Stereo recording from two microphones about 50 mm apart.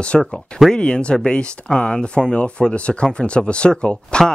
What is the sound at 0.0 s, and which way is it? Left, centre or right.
Speech, left.